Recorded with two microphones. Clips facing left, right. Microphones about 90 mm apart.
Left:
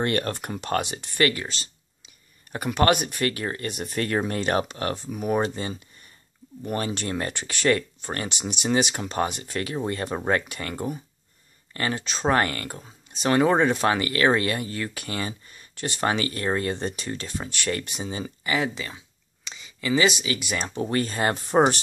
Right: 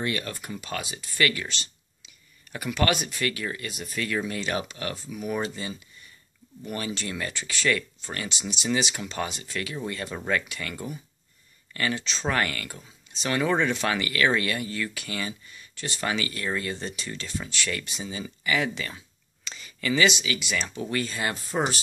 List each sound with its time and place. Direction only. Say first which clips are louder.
0.0 s speech: left 5 dB; 50° left (ahead or behind)
0.9 s speech: left 3 dB; 40° left (ahead or behind)
2.9 s speech: left 5 dB; 55° left (ahead or behind)
3.3 s speech: left 2 dB; 40° left (ahead or behind)
3.6 s speech: left 4 dB; 55° left (ahead or behind); by 8.3 s 35° left (ahead or behind)
8.3 s speech: left 2 dB; 55° left (ahead or behind)
9.4 s speech: left 4 dB; 35° left (ahead or behind)
12.0 s speech: left 4 dB; 50° left (ahead or behind)
12.3 s speech: left 5 dB; 35° left (ahead or behind)
16.7 s speech: left 5 dB; 50° left (ahead or behind)
18.0 s a sound: left 1 dB; 35° left (ahead or behind)
20.1 s speech: left 1 dB; 45° left (ahead or behind)